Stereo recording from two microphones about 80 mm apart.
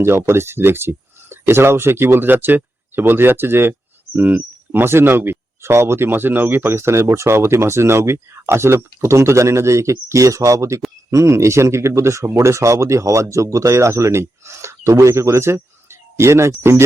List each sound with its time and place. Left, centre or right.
0.0 s speech: right